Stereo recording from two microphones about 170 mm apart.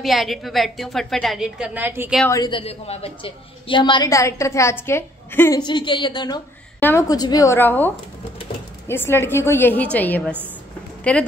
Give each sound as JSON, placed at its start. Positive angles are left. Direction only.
{"t": 0.0, "sound": "a woman's voice", "side_deg": 0}
{"t": 2.2, "sound": "a woman's voice", "side_deg": 20}
{"t": 2.6, "sound": "a woman's voice", "side_deg": 35}
{"t": 5.6, "sound": "a woman's voice", "side_deg": 25}
{"t": 6.8, "sound": "a woman's voice", "side_deg": 15}